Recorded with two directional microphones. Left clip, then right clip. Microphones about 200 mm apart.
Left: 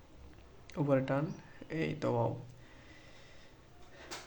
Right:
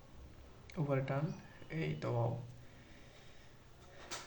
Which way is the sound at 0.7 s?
50° left (ahead or behind).